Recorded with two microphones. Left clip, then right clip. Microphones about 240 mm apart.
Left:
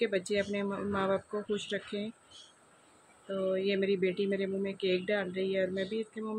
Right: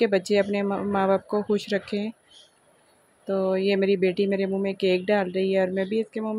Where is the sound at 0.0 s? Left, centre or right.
Right.